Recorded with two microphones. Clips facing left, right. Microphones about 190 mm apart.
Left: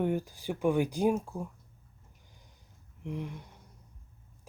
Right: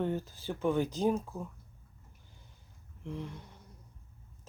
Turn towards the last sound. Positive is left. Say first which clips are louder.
# left 3 dB
turn(degrees=15)  # may be behind; listen again after turning